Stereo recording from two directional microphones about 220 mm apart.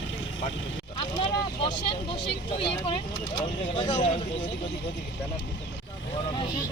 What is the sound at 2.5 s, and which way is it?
Speech, 25° left (ahead or behind).